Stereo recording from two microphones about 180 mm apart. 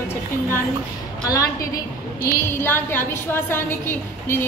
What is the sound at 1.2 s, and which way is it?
A woman's voice, 20° left (ahead or behind).